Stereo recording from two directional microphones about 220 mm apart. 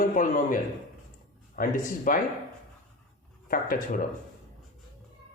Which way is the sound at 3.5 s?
40° left (ahead or behind).